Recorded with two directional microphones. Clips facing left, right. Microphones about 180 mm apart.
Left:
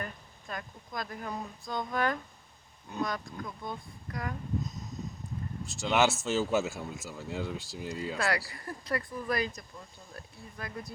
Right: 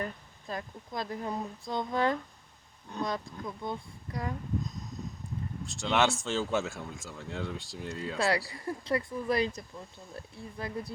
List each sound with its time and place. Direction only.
0.0 s speech: 30° right (ahead or behind)
5.6 s speech: 5° left (ahead or behind)
8.4 s speech: 25° right (ahead or behind)